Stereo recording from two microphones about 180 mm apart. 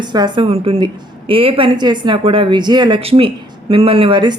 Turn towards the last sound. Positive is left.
turn(degrees=-25)  # may be behind; listen again after turning